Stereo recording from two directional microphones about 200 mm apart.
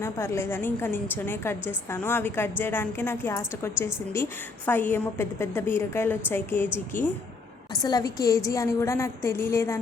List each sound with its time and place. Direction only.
0.0 s a woman's voice: 15° left (ahead or behind)
6.9 s speech: 40° left (ahead or behind)
7.7 s a woman's voice: 20° left (ahead or behind)